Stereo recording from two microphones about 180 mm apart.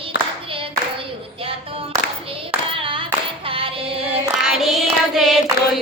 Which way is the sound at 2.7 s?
30° right (ahead or behind).